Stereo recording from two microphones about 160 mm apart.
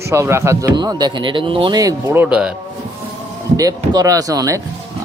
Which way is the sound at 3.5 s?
20° right (ahead or behind).